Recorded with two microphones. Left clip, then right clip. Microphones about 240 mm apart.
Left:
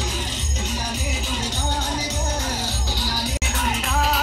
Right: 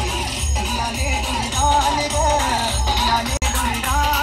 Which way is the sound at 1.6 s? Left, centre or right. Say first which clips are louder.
Right 12 dB; right.